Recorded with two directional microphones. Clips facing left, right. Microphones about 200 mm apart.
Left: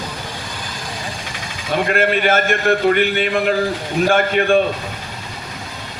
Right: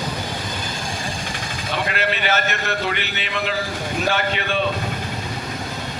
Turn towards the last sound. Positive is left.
turn(degrees=50)  # may be behind; listen again after turning